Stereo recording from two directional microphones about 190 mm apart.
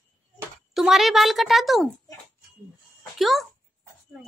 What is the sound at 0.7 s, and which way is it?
A woman's voice, centre (ahead or behind).